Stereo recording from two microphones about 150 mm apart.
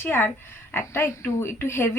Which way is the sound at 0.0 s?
15° left (ahead or behind).